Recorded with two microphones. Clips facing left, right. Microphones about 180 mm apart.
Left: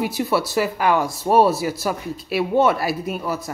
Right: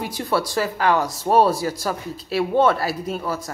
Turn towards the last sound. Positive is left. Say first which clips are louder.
# left 1 dB
turn(degrees=10)  # may be behind; listen again after turning